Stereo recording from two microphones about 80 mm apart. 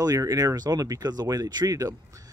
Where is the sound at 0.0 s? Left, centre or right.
Right.